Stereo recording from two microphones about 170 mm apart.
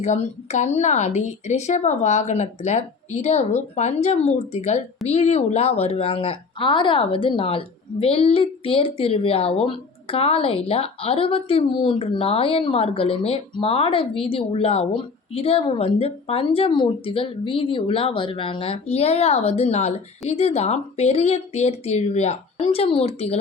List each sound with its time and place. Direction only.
0.0 s a woman's voice: 40° left (ahead or behind)